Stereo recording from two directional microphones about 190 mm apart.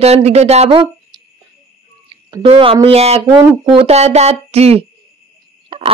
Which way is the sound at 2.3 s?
30° right (ahead or behind).